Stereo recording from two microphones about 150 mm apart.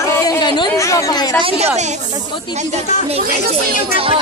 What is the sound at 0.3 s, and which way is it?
Chatter, 30° left (ahead or behind).